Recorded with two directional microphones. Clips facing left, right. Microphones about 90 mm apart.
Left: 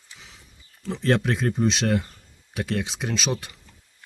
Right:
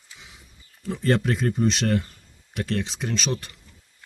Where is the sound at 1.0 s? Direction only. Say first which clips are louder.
Even; centre (ahead or behind).